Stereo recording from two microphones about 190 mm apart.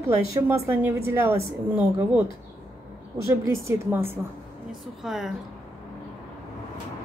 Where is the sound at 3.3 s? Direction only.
15° right (ahead or behind).